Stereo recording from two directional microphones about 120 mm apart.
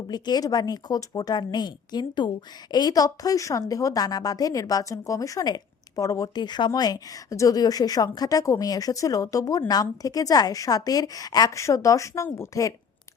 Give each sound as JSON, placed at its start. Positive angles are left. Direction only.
{"t": 0.1, "sound": "a woman's voice", "side_deg": 35}